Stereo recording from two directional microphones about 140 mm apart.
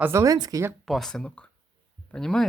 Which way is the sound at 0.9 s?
5° left (ahead or behind).